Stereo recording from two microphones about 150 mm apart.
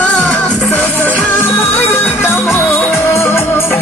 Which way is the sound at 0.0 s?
10° left (ahead or behind).